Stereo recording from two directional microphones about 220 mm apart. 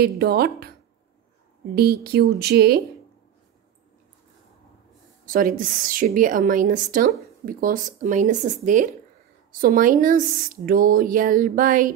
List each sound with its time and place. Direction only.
0.0 s speech: 45° right (ahead or behind)
1.8 s speech: 45° right (ahead or behind)
5.2 s a woman's voice: 40° right (ahead or behind)